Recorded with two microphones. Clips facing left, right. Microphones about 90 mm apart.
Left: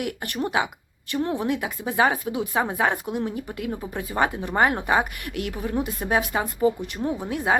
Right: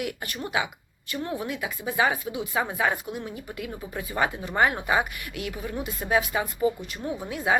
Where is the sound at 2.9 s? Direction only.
55° left (ahead or behind).